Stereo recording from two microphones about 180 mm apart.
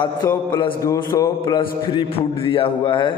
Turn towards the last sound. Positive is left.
turn(degrees=30)  # may be behind; listen again after turning